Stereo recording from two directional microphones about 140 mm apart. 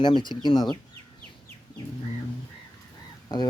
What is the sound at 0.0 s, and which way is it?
Speech, 35° left (ahead or behind).